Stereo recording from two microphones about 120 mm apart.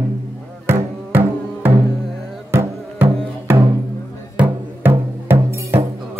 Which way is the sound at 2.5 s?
20° right (ahead or behind).